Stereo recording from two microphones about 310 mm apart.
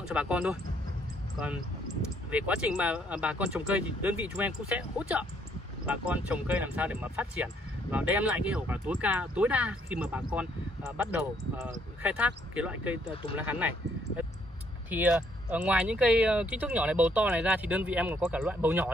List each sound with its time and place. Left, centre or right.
0.0 s speech: centre
2.3 s speech: centre
13.1 s speech: centre
13.4 s speech: centre